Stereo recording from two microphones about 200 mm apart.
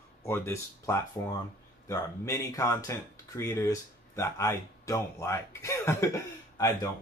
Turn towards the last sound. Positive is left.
turn(degrees=15)  # may be behind; listen again after turning